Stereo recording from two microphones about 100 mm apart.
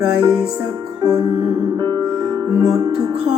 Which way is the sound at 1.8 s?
40° right (ahead or behind).